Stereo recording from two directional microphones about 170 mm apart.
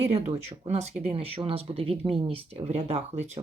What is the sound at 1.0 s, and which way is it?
Speech, 35° right (ahead or behind).